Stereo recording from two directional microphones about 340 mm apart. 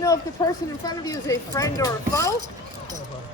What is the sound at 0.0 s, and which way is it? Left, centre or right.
Speech, centre.